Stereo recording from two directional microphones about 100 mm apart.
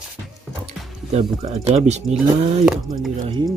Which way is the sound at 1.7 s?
90° right.